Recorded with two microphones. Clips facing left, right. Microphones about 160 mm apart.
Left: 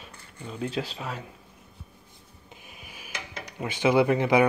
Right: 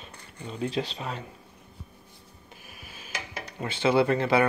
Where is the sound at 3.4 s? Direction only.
10° left (ahead or behind).